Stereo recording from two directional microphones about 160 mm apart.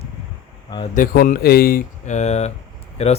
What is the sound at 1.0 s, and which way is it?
Speech, 55° left (ahead or behind).